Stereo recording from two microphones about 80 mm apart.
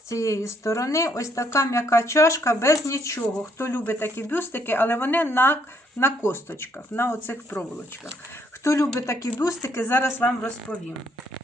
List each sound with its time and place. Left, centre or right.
0.1 s speech: left
3.6 s speech: left
8.6 s speech: left
10.2 s speech: centre